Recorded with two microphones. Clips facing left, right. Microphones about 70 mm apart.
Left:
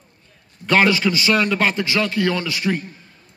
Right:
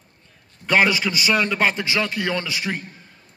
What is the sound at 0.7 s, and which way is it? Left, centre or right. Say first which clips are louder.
A man's voice: left 2 dB; centre.